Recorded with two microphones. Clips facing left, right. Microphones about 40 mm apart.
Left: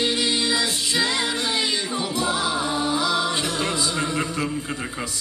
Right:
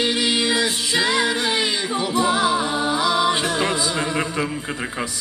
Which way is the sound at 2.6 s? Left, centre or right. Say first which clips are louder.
Right 2 dB; right.